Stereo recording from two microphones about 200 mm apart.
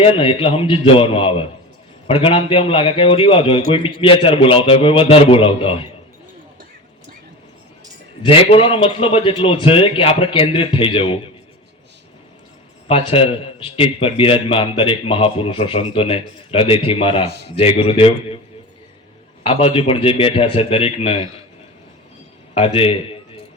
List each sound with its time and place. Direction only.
0.0 s a man's voice: 25° left (ahead or behind)
8.2 s a man's voice: 25° left (ahead or behind)
12.9 s a man's voice: 30° left (ahead or behind)
17.2 s a man's voice: 55° right (ahead or behind)
17.5 s a man's voice: 30° left (ahead or behind)
19.5 s a man's voice: 30° left (ahead or behind)
22.5 s a man's voice: 30° left (ahead or behind)